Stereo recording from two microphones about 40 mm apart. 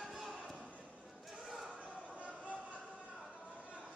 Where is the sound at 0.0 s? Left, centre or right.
Centre.